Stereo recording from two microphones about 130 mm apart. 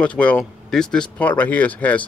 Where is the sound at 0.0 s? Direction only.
10° left (ahead or behind).